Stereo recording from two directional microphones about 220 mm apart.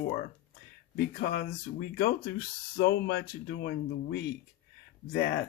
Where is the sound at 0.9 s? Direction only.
45° left (ahead or behind).